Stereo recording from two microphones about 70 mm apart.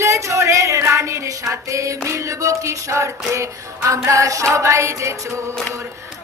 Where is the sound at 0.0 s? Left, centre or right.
Right.